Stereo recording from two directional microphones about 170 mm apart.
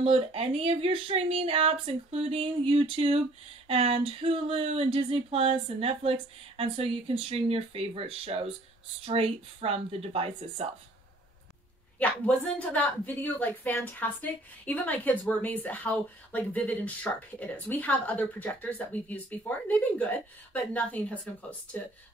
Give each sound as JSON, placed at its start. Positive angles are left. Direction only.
{"t": 0.0, "sound": "speech", "side_deg": -35}
{"t": 12.0, "sound": "a woman's voice", "side_deg": 10}